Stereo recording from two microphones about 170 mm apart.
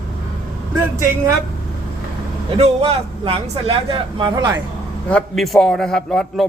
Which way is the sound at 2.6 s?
35° right (ahead or behind).